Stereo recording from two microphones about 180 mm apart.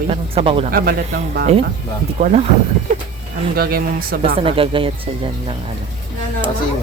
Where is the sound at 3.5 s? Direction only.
55° right (ahead or behind).